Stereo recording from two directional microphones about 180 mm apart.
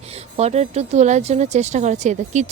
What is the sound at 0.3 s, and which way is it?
Speech, 35° right (ahead or behind).